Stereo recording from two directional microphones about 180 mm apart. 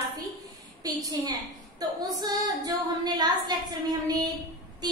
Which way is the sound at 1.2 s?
20° right (ahead or behind).